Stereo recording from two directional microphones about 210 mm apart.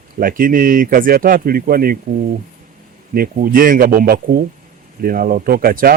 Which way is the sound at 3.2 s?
45° right (ahead or behind).